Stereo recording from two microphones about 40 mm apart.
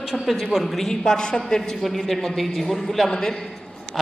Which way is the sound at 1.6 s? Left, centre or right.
Centre.